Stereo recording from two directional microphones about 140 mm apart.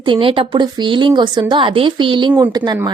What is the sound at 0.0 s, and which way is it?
Speech, 40° right (ahead or behind).